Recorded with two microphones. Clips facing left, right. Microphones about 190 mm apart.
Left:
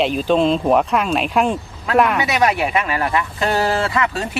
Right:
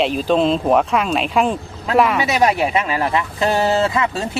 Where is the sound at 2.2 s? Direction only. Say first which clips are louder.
Right 1 dB; 25° right (ahead or behind).